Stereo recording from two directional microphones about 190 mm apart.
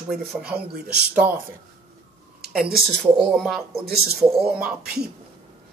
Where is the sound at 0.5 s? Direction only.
60° right (ahead or behind).